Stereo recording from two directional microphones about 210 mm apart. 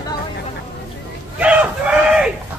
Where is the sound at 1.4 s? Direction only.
5° right (ahead or behind).